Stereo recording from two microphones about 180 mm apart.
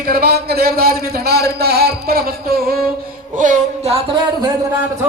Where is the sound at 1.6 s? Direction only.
60° right (ahead or behind).